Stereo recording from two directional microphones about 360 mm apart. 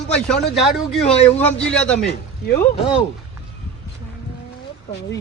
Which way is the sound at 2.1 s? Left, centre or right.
Left.